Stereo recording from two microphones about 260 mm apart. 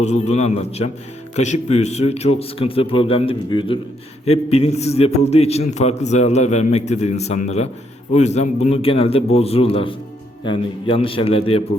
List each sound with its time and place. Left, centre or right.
0.0 s a man's voice: left